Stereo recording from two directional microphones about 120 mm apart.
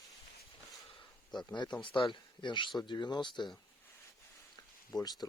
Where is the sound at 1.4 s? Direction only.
40° left (ahead or behind).